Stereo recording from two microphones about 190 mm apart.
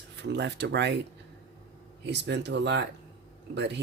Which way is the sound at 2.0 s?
65° right (ahead or behind).